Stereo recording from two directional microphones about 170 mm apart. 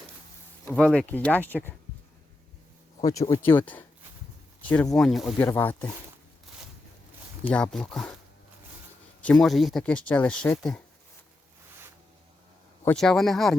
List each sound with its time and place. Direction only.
0.6 s speech: 10° left (ahead or behind)
3.0 s speech: 20° left (ahead or behind)
4.9 s speech: centre (ahead or behind)
5.4 s speech: 15° left (ahead or behind)
7.5 s speech: 5° left (ahead or behind)
9.2 s speech: centre (ahead or behind)
12.8 s speech: 5° left (ahead or behind)